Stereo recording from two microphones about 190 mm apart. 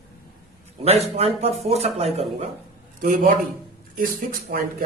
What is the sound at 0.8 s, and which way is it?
Speech, 35° right (ahead or behind).